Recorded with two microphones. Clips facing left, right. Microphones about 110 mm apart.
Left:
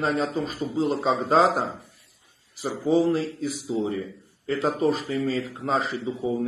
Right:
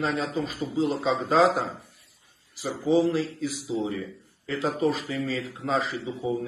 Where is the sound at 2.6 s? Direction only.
40° left (ahead or behind).